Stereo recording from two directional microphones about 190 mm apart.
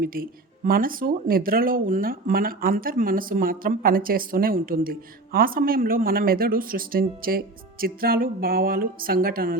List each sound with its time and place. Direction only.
0.0 s speech: 50° right (ahead or behind)